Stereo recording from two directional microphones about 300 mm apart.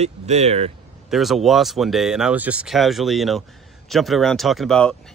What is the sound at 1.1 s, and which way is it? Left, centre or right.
Speech, centre.